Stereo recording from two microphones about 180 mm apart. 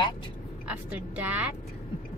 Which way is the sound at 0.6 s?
10° right (ahead or behind).